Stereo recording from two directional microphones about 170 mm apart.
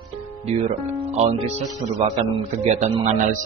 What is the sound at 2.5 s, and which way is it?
Speech, 40° right (ahead or behind).